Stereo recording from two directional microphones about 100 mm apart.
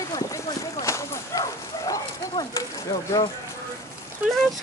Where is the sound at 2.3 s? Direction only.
45° left (ahead or behind).